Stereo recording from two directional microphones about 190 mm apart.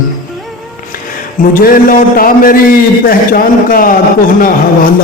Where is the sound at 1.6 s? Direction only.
50° left (ahead or behind).